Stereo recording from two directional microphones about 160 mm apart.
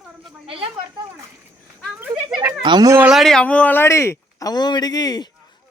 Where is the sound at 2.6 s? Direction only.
25° right (ahead or behind).